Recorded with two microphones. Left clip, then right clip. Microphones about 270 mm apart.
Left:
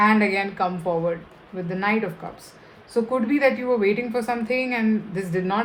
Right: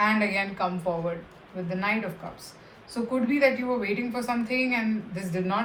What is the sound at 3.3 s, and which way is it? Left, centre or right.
Speech, left.